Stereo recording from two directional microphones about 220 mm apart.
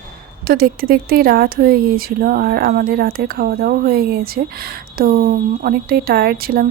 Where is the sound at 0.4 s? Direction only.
45° right (ahead or behind).